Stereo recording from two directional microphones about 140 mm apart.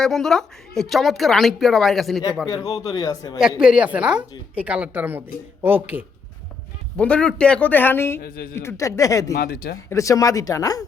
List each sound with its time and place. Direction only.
0.0 s speech: 5° left (ahead or behind)
2.6 s speech: 25° left (ahead or behind)
3.6 s a woman's voice: 5° right (ahead or behind)
6.9 s a man's voice: 10° left (ahead or behind)
8.2 s a woman's voice: 90° left
8.5 s speech: 20° left (ahead or behind)
9.4 s a woman's voice: 90° left
9.9 s speech: 25° left (ahead or behind)